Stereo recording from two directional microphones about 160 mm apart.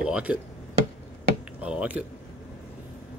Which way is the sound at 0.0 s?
5° right (ahead or behind).